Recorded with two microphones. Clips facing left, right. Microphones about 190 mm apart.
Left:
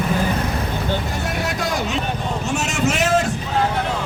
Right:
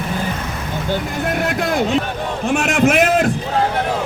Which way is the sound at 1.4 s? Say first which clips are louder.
Right 6 dB; 55° right (ahead or behind).